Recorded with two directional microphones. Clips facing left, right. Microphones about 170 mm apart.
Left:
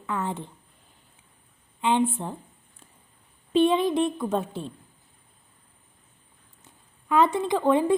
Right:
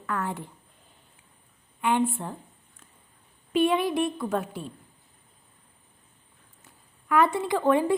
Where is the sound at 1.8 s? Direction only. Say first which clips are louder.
Left 1 dB; 20° left (ahead or behind).